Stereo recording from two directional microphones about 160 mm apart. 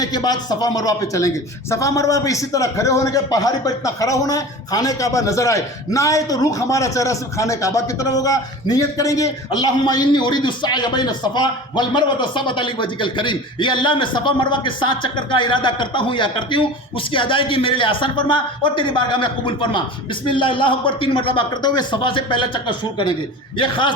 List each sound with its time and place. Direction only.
0.0 s a man's voice: 25° left (ahead or behind)